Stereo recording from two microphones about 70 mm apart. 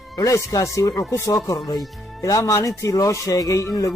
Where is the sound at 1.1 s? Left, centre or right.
Left.